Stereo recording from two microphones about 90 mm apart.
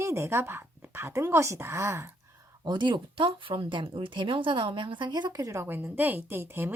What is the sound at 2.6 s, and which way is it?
A woman's voice, 60° right (ahead or behind).